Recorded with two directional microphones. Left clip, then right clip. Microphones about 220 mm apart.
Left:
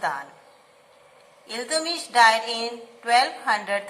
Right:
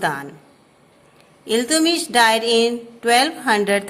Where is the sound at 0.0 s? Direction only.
45° right (ahead or behind).